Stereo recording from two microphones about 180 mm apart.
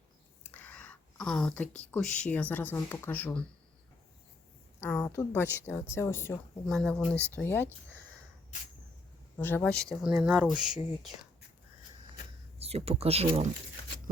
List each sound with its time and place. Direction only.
0.4 s speech: 10° left (ahead or behind)
4.8 s a woman's voice: 10° left (ahead or behind)
6.7 s a woman's voice: centre (ahead or behind)
9.4 s speech: 10° left (ahead or behind)
12.5 s speech: 35° right (ahead or behind)